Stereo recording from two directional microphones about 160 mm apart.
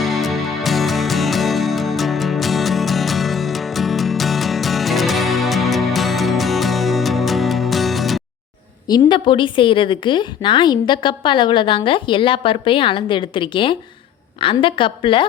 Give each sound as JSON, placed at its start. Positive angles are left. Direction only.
{"t": 0.0, "sound": "music", "side_deg": 0}
{"t": 8.9, "sound": "a woman's voice", "side_deg": 30}